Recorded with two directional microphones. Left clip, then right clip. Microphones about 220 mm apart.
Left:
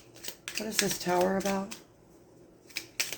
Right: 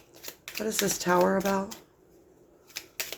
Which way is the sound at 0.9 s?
40° right (ahead or behind).